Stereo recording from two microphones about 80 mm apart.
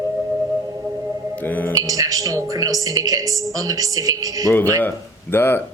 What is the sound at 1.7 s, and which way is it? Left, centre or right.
Speech, right.